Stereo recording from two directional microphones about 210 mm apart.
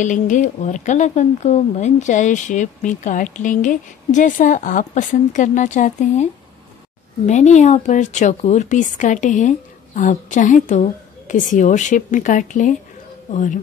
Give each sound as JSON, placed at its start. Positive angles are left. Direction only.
{"t": 0.0, "sound": "speech", "side_deg": 35}
{"t": 7.2, "sound": "speech", "side_deg": 35}